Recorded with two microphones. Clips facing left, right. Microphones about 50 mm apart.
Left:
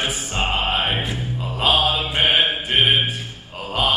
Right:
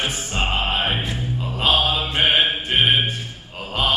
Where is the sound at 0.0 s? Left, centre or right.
Centre.